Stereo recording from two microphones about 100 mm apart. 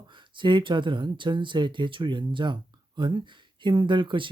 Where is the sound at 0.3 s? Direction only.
55° right (ahead or behind).